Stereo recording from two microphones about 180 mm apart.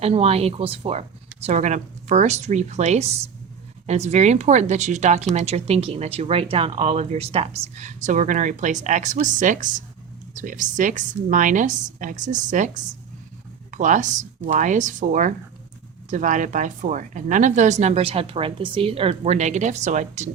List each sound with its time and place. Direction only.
0.0 s a woman's voice: 35° right (ahead or behind)